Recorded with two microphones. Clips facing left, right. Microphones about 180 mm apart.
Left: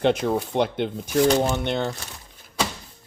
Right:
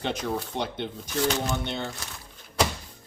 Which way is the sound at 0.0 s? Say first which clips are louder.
Left 8 dB; 55° left (ahead or behind).